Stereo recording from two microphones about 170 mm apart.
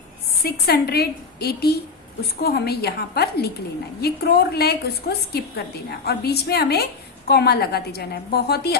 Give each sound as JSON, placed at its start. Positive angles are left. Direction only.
{"t": 0.4, "sound": "a woman's voice", "side_deg": 65}